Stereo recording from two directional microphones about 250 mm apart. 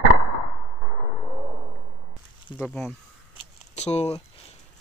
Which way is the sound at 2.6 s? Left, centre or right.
Centre.